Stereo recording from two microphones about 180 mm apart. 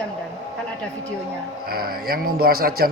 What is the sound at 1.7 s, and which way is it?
A man's voice, 55° right (ahead or behind).